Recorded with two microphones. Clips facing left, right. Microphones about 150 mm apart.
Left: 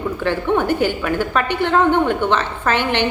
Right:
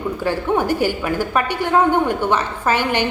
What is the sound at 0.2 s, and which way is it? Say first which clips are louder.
A woman's voice: left 1 dB; 10° right (ahead or behind).